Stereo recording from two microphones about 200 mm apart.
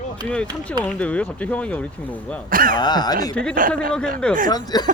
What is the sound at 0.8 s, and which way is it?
Speech, 5° left (ahead or behind).